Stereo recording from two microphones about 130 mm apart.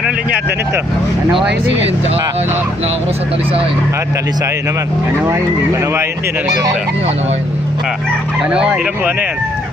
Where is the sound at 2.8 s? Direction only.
50° right (ahead or behind).